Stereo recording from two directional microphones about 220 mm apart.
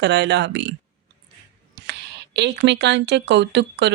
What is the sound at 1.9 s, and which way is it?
Speech, 50° right (ahead or behind).